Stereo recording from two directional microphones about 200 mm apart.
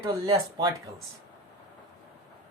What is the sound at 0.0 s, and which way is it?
Speech, 20° right (ahead or behind).